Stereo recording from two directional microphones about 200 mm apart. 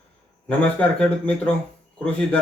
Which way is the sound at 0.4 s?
5° left (ahead or behind).